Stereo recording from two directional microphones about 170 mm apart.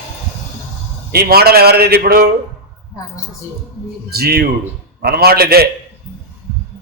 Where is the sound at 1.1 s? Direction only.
65° right (ahead or behind).